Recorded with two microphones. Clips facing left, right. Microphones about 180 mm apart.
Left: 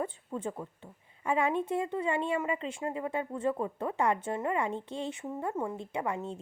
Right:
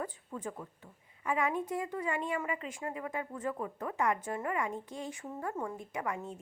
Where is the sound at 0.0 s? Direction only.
25° left (ahead or behind).